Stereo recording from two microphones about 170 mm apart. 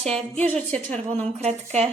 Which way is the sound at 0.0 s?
5° left (ahead or behind).